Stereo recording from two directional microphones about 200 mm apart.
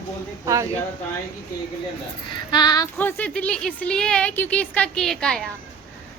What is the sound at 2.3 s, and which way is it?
Speech, 20° left (ahead or behind).